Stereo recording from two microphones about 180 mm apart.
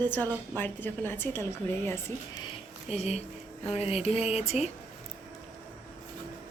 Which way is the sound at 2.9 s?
35° left (ahead or behind).